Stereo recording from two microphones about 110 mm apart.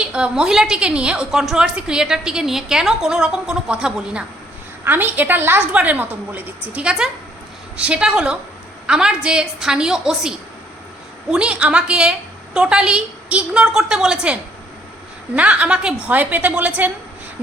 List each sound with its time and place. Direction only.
0.0 s a woman's voice: 10° right (ahead or behind)
15.4 s a woman's voice: 10° right (ahead or behind)